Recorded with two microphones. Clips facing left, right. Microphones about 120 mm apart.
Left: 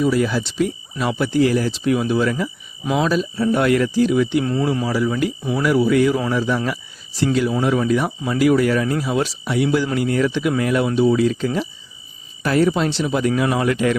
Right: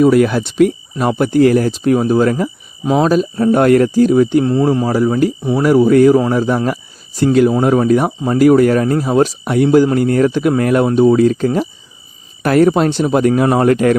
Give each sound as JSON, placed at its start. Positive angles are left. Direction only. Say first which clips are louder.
{"t": 0.0, "sound": "speech", "louder": "right 8 dB", "side_deg": -55}
{"t": 5.4, "sound": "speech", "louder": "right 6 dB", "side_deg": -25}
{"t": 5.6, "sound": "speech", "louder": "right 7 dB", "side_deg": -40}